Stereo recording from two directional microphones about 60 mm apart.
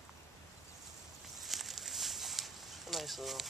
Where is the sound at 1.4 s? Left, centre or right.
Centre.